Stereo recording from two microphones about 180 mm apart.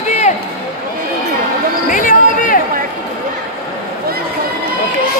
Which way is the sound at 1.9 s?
50° left (ahead or behind).